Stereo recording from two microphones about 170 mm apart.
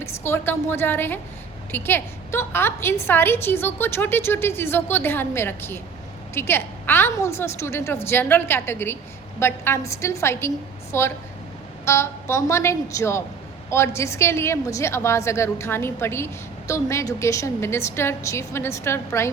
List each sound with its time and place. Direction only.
0.0 s a woman's voice: 15° left (ahead or behind)